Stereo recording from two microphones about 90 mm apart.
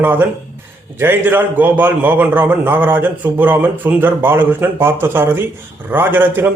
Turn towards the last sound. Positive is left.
turn(degrees=-20)  # may be behind; listen again after turning